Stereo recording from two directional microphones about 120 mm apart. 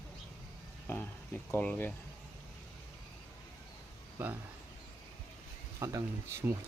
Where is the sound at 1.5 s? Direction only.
15° left (ahead or behind).